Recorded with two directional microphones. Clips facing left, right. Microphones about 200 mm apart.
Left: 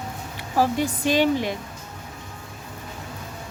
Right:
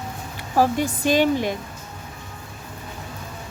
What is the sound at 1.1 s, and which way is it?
Speech, 45° right (ahead or behind).